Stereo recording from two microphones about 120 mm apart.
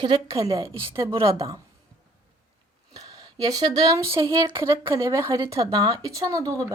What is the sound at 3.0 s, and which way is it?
A woman's voice, 30° right (ahead or behind).